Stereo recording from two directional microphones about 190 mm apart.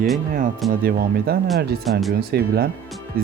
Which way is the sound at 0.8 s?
50° right (ahead or behind).